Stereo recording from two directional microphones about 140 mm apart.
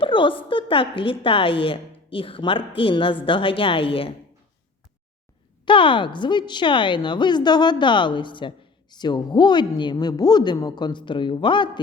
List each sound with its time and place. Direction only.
0.0 s a sound: 35° left (ahead or behind)
0.4 s a woman's voice: 40° left (ahead or behind)
5.6 s a woman's voice: 35° left (ahead or behind)